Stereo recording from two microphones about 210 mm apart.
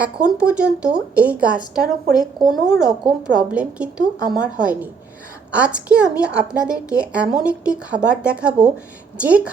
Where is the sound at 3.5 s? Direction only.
5° right (ahead or behind).